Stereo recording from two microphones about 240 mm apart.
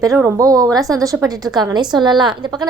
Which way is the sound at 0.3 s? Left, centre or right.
Centre.